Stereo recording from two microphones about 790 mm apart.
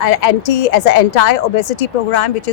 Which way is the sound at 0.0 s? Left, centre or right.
Left.